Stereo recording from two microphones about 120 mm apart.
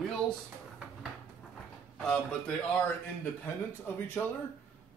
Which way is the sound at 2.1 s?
10° left (ahead or behind).